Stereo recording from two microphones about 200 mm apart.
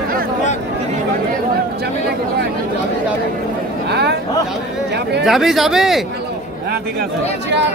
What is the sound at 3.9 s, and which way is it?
Speech, 55° right (ahead or behind).